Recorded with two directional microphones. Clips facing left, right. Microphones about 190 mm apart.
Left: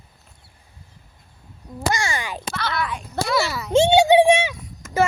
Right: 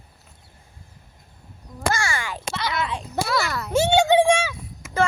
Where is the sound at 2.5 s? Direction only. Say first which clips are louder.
Even; 20° right (ahead or behind).